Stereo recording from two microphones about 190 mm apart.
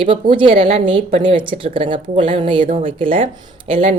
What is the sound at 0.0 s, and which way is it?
A woman's voice, 25° right (ahead or behind).